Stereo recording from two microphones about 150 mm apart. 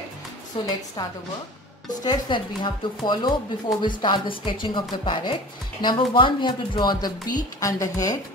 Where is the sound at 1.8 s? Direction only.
30° left (ahead or behind).